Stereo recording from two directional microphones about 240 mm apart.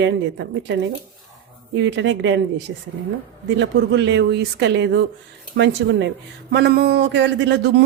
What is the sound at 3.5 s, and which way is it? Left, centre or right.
Speech, right.